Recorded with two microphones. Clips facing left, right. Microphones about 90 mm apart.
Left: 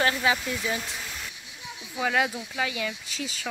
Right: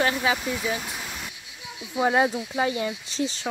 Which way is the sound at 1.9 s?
30° right (ahead or behind).